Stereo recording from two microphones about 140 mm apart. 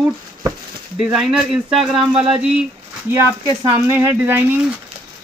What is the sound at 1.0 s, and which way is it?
Speech, 5° right (ahead or behind).